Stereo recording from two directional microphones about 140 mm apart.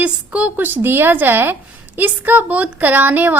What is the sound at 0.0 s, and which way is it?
A woman's voice, 10° right (ahead or behind).